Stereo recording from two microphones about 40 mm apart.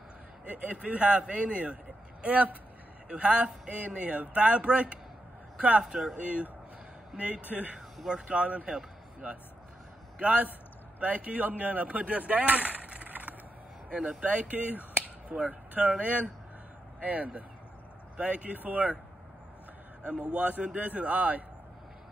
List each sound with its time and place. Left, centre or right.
0.5 s a man's voice: right
5.9 s speech: centre
7.2 s a man's voice: right
13.9 s speech: right
20.0 s a man's voice: right